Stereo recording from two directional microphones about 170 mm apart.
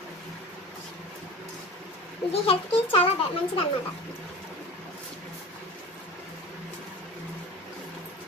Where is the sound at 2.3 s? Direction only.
35° left (ahead or behind).